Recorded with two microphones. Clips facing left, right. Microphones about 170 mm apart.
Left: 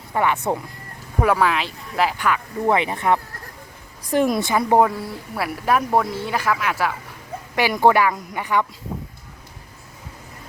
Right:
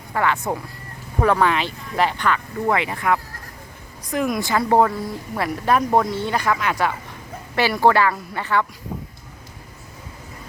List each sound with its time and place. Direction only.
0.1 s speech: 20° left (ahead or behind)
1.2 s speech: 5° left (ahead or behind)
2.6 s speech: 20° left (ahead or behind); by 6.9 s 5° left (ahead or behind)
7.5 s speech: 15° left (ahead or behind)